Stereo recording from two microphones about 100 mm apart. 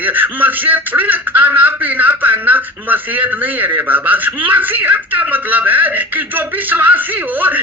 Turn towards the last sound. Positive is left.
turn(degrees=-15)  # may be behind; listen again after turning